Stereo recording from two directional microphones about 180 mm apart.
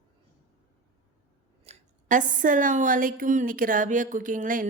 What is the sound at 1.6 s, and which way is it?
Speech, 45° right (ahead or behind).